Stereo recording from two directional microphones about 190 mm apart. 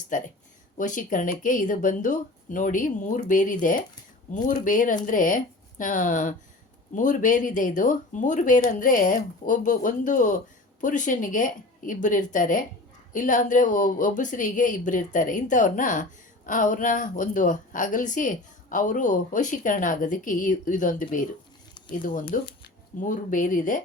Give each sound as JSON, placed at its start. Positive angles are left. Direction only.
{"t": 0.1, "sound": "a woman's voice", "side_deg": 40}